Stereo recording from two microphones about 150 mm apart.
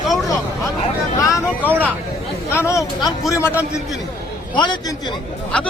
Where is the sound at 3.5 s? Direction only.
10° right (ahead or behind).